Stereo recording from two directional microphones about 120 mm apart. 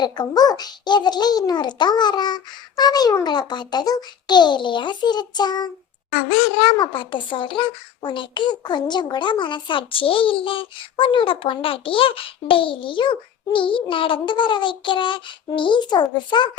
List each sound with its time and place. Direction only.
0.0 s a child's voice: 35° left (ahead or behind)